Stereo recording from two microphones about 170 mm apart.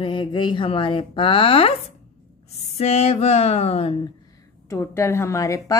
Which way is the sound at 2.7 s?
35° left (ahead or behind).